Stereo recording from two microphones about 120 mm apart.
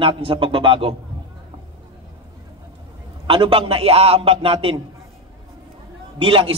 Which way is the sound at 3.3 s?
50° right (ahead or behind).